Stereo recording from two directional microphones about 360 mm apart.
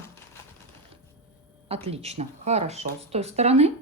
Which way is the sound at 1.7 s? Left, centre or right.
Centre.